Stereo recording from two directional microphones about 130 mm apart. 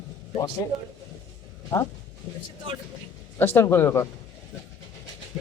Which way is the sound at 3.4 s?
20° left (ahead or behind).